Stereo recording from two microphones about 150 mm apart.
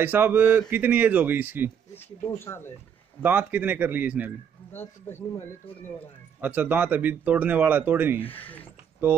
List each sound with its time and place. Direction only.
0.0 s speech: 15° right (ahead or behind)
2.0 s speech: 15° left (ahead or behind)
3.2 s speech: 10° right (ahead or behind)
4.7 s speech: 15° left (ahead or behind)
6.4 s speech: 10° right (ahead or behind)
8.2 s speech: 10° left (ahead or behind)
9.0 s speech: 15° right (ahead or behind)